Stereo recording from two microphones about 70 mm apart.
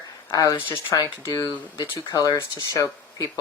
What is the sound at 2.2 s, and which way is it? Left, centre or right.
Speech, left.